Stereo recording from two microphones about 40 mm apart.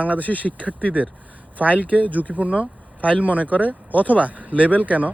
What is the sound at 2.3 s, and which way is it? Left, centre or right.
Speech, right.